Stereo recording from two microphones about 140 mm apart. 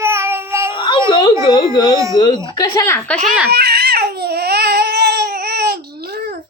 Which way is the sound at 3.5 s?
90° right.